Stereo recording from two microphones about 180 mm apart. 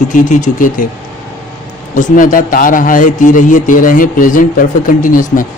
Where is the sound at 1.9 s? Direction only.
45° left (ahead or behind).